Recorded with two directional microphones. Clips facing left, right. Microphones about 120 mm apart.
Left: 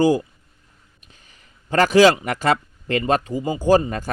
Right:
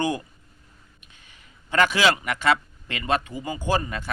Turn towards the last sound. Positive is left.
turn(degrees=40)  # may be behind; listen again after turning